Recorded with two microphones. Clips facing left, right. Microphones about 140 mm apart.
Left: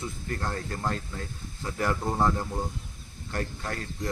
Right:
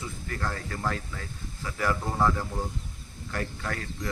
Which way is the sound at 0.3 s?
30° left (ahead or behind).